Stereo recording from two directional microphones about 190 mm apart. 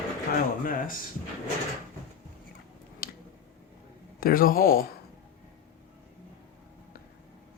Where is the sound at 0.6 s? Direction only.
45° left (ahead or behind).